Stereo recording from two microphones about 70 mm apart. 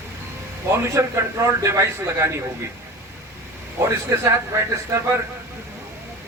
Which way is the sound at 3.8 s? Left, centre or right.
Right.